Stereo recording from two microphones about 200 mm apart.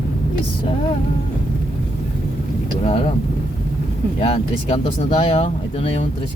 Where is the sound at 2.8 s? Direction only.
30° left (ahead or behind).